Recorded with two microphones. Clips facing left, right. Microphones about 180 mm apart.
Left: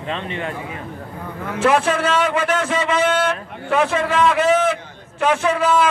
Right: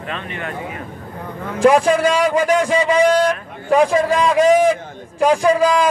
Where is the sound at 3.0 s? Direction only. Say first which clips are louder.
Right 4 dB; 35° right (ahead or behind).